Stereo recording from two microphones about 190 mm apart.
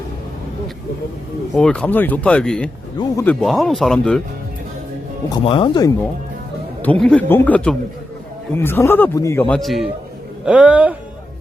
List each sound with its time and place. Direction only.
1.5 s speech: 5° left (ahead or behind)
5.3 s speech: 25° left (ahead or behind)
6.8 s speech: 5° left (ahead or behind)
9.6 s speech: centre (ahead or behind)